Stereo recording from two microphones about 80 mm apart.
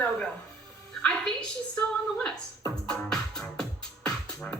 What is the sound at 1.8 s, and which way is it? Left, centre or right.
Speech, centre.